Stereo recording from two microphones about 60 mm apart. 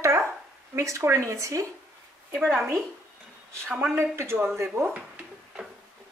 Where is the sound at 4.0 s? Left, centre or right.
Right.